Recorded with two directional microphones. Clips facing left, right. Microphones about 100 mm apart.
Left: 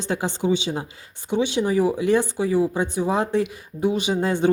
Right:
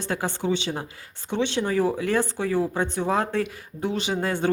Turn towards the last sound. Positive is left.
turn(degrees=20)  # may be behind; listen again after turning